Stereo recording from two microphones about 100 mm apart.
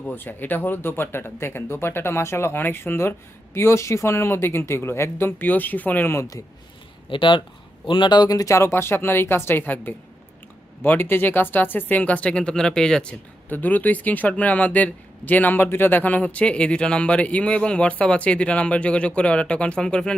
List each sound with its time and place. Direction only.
0.0 s speech: 20° left (ahead or behind)
6.1 s speech: 35° left (ahead or behind)
7.1 s speech: 55° left (ahead or behind); by 20.1 s 10° left (ahead or behind)